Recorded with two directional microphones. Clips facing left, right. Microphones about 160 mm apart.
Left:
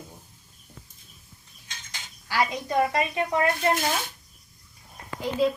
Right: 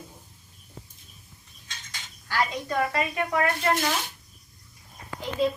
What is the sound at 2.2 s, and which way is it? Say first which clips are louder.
A woman's voice: left 1 dB; 15° left (ahead or behind).